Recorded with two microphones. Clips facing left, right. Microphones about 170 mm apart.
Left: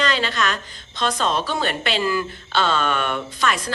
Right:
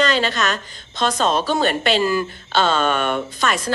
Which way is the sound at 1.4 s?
40° right (ahead or behind).